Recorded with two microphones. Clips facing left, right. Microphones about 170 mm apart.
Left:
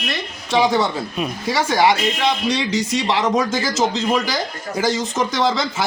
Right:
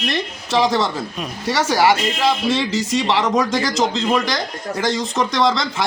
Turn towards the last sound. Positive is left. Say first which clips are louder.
# right 1 dB
turn(degrees=5)  # may be behind; listen again after turning